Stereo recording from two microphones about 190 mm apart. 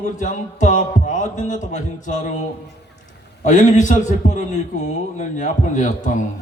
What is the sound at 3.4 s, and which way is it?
Speech, 40° left (ahead or behind).